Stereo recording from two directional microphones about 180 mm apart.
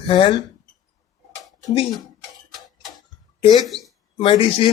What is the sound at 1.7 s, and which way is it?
Speech, 25° left (ahead or behind).